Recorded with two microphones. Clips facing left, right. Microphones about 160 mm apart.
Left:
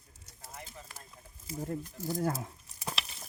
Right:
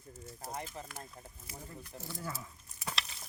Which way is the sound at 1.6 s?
45° left (ahead or behind).